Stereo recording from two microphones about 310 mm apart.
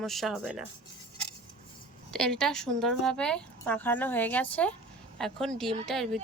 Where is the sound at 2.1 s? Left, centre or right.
Centre.